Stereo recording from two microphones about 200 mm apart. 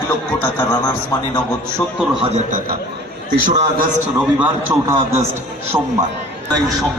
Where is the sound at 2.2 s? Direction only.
35° right (ahead or behind).